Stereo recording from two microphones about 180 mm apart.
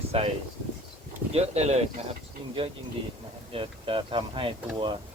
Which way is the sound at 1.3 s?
35° right (ahead or behind).